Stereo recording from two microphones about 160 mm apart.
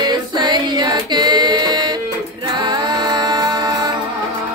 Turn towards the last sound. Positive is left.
turn(degrees=-25)  # may be behind; listen again after turning